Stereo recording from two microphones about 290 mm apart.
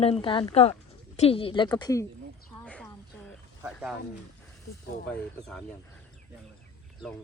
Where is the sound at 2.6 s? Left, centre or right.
Centre.